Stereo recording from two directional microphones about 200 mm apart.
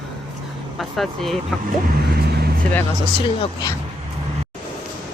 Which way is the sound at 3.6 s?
15° left (ahead or behind).